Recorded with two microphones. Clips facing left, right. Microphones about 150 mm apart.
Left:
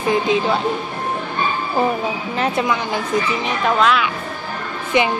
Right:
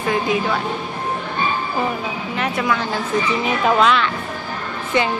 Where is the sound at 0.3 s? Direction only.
25° left (ahead or behind).